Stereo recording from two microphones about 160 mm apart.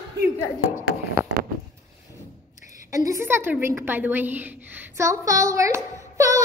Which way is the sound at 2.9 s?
20° right (ahead or behind).